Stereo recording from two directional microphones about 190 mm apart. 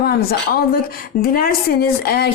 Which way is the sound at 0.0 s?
55° left (ahead or behind).